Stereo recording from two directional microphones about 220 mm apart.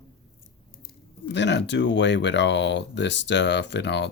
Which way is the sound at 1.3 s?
55° left (ahead or behind).